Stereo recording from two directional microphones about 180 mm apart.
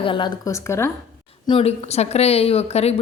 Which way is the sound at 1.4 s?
30° left (ahead or behind).